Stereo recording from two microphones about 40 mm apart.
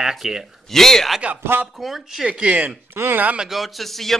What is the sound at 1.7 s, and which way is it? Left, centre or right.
Speech, centre.